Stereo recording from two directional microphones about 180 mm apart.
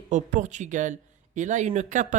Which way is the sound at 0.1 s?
40° right (ahead or behind).